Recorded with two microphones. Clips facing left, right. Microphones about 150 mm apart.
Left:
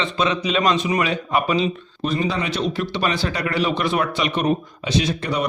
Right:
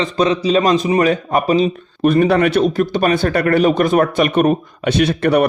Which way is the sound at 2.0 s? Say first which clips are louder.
Right 11 dB; 60° right (ahead or behind).